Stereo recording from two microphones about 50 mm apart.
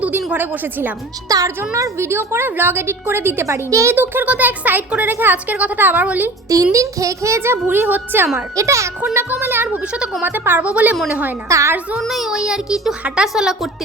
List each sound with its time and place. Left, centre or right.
0.3 s a child's voice: right
1.5 s a woman's voice: right
3.4 s speech: right
3.9 s a child's voice: right
6.7 s a woman's voice: right
8.5 s speech: right
9.1 s speech: right
9.7 s a woman's voice: centre
10.2 s speech: right
10.6 s a woman's voice: right
11.4 s speech: right
11.9 s a child's voice: centre
12.3 s a child's voice: centre